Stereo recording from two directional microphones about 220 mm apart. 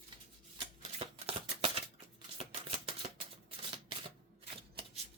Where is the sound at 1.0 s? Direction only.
25° right (ahead or behind).